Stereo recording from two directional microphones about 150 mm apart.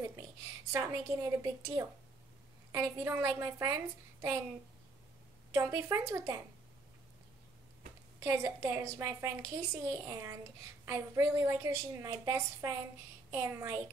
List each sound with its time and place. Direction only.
0.7 s a woman's voice: 20° right (ahead or behind)
5.5 s a woman's voice: 20° right (ahead or behind)
8.2 s a woman's voice: 20° right (ahead or behind)